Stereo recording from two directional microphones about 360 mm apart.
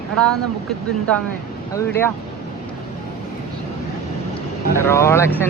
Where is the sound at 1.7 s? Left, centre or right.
Centre.